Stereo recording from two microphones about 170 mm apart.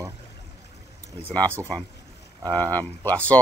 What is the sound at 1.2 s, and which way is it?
Speech, 10° left (ahead or behind).